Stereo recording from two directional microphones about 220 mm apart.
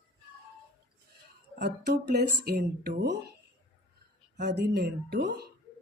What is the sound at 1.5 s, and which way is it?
Speech, 50° right (ahead or behind).